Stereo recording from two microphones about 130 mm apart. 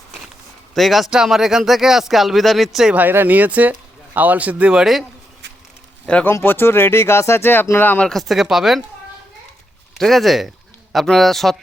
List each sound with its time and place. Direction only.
0.7 s speech: centre (ahead or behind)
3.0 s speech: 15° right (ahead or behind)
6.1 s speech: 10° left (ahead or behind)
10.0 s speech: centre (ahead or behind)